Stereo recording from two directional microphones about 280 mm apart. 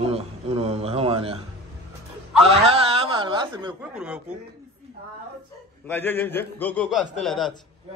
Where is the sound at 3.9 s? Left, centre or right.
Centre.